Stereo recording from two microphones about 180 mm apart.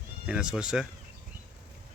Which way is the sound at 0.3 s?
5° right (ahead or behind).